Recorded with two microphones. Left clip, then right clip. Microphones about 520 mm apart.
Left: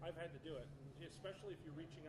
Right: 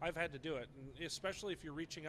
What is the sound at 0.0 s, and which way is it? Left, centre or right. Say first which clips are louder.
A man's voice: right 9 dB; right.